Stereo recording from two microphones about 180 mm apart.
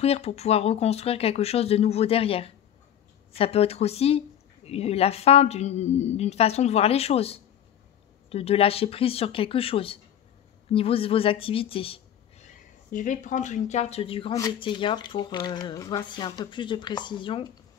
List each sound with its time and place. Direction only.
0.0 s a woman's voice: 35° left (ahead or behind)
12.4 s speech: 45° left (ahead or behind); by 17.5 s 25° left (ahead or behind)